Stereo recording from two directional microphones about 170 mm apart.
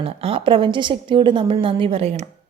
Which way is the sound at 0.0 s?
35° right (ahead or behind).